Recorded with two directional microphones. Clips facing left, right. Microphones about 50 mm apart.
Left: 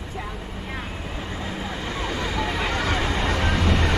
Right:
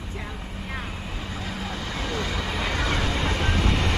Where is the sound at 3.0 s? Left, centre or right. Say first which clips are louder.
Left 2 dB; left.